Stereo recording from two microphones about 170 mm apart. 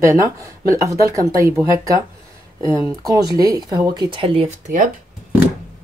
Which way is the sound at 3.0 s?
20° right (ahead or behind).